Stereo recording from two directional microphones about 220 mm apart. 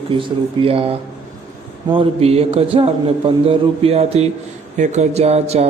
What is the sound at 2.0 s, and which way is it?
Speech, 25° right (ahead or behind).